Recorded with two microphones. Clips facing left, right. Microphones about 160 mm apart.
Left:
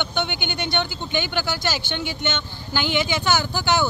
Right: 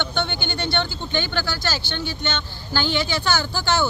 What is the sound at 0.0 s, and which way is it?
Speech, 15° left (ahead or behind).